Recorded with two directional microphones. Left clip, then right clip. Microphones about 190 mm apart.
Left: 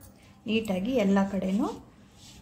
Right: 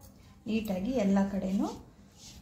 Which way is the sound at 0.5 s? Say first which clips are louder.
Left 5 dB; 15° left (ahead or behind).